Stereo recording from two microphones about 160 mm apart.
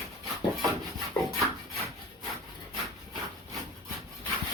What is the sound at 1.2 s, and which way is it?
Wood, 10° left (ahead or behind).